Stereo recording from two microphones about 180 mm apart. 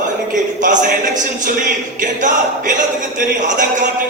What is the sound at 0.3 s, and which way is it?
A man's voice, 45° right (ahead or behind).